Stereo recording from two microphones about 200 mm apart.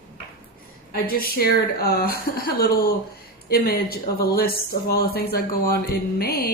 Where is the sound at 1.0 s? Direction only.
50° left (ahead or behind).